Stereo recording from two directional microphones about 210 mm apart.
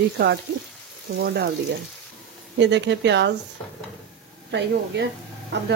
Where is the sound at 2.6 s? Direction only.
55° right (ahead or behind).